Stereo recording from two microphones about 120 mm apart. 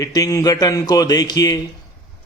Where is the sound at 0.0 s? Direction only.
30° left (ahead or behind).